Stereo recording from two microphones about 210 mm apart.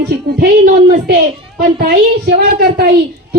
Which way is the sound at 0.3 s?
45° right (ahead or behind).